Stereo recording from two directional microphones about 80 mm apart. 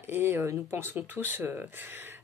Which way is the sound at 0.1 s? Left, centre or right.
Right.